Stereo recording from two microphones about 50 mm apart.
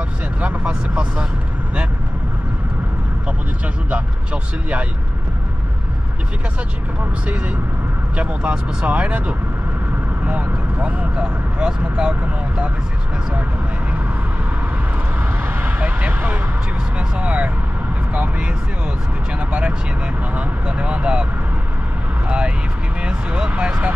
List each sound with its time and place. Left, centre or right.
0.7 s speech: right
3.9 s speech: right
7.2 s speech: right
15.2 s vehicle: right
17.2 s speech: right
23.0 s speech: right